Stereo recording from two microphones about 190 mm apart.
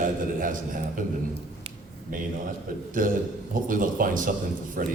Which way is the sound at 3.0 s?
45° right (ahead or behind).